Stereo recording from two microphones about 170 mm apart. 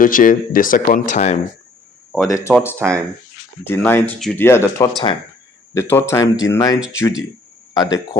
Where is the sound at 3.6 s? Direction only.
15° left (ahead or behind).